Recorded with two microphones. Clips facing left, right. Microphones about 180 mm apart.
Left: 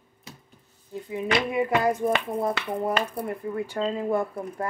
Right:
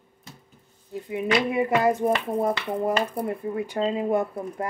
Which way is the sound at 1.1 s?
25° right (ahead or behind).